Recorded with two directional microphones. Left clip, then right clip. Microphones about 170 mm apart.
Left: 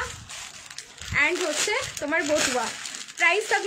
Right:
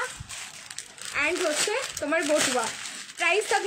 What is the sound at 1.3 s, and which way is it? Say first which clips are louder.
A woman's voice: left 1 dB; 10° left (ahead or behind).